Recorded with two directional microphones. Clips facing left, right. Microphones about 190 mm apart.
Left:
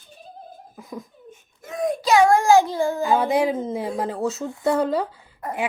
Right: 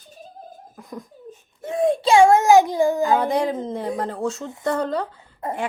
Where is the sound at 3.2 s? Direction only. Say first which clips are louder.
Left 1 dB; 5° left (ahead or behind).